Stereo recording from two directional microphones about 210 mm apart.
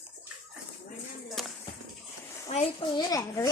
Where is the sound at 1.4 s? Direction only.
Centre (ahead or behind).